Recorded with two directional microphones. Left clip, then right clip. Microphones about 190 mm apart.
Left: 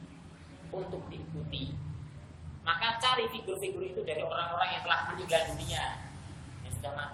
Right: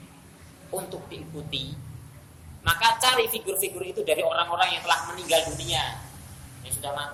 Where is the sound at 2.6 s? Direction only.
25° right (ahead or behind).